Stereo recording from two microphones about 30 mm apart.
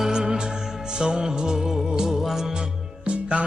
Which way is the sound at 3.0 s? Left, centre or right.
Right.